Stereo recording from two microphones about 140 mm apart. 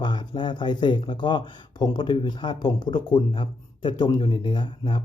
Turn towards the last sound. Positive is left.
turn(degrees=35)  # may be behind; listen again after turning